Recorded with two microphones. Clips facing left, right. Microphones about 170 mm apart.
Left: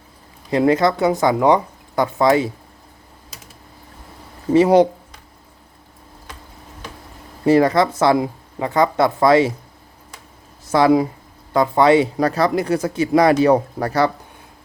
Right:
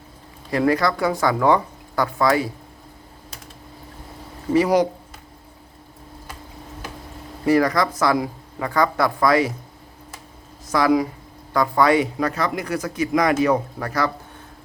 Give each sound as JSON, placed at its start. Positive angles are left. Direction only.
{"t": 0.5, "sound": "speech", "side_deg": 20}
{"t": 4.5, "sound": "speech", "side_deg": 25}
{"t": 7.4, "sound": "speech", "side_deg": 25}
{"t": 10.7, "sound": "speech", "side_deg": 30}
{"t": 12.1, "sound": "speech", "side_deg": 35}